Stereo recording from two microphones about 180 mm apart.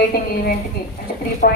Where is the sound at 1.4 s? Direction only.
50° left (ahead or behind).